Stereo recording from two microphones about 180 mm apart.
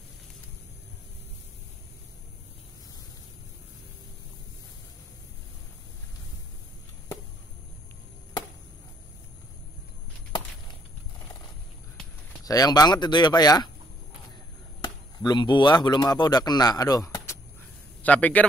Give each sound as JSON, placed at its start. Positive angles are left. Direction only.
{"t": 12.4, "sound": "speech", "side_deg": 20}
{"t": 14.8, "sound": "speech", "side_deg": 25}
{"t": 18.0, "sound": "a man's voice", "side_deg": 10}